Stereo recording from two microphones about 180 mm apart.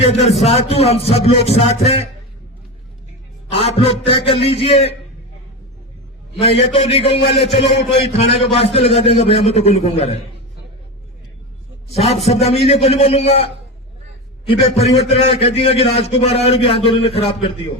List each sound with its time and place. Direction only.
0.0 s a man's voice: 35° left (ahead or behind)
3.5 s a man's voice: 30° left (ahead or behind)
6.6 s a man's voice: 35° left (ahead or behind)
11.9 s a man's voice: 35° left (ahead or behind)